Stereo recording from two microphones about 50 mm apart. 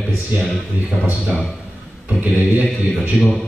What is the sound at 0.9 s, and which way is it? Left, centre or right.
Speech, centre.